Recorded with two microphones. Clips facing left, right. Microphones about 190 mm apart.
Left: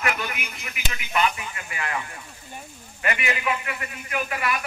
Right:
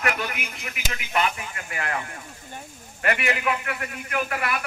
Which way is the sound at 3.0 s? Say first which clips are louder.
Right 2 dB; 60° right (ahead or behind).